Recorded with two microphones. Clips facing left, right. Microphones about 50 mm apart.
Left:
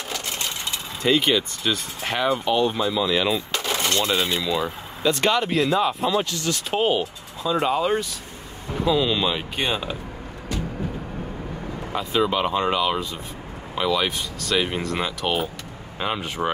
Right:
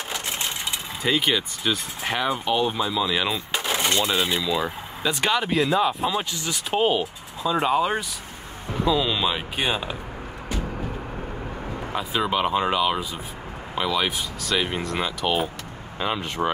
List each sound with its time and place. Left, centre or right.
0.1 s coin: centre
1.0 s speech: centre
11.9 s speech: centre